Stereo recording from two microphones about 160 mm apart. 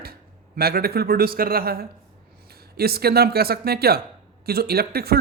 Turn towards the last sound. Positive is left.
turn(degrees=-75)  # may be behind; listen again after turning